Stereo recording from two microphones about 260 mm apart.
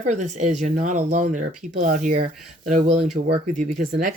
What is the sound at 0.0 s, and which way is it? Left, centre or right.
Speech, right.